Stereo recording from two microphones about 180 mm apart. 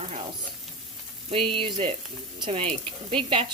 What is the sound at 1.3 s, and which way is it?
Frying, 30° right (ahead or behind).